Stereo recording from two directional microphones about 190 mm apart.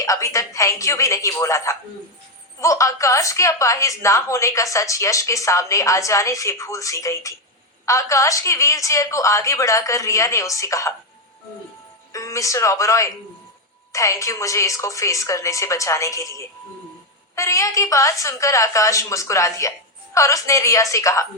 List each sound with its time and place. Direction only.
0.0 s a woman's voice: 15° left (ahead or behind)
12.1 s a woman's voice: 15° left (ahead or behind)